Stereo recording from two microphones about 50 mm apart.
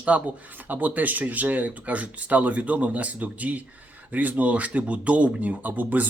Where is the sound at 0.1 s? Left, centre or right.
Right.